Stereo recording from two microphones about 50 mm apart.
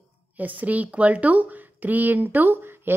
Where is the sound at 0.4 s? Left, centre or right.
Right.